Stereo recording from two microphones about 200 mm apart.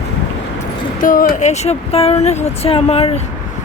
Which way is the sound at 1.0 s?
40° left (ahead or behind).